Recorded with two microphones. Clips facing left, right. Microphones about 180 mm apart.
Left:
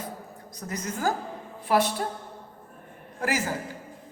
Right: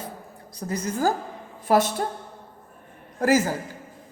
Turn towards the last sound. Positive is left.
turn(degrees=-40)  # may be behind; listen again after turning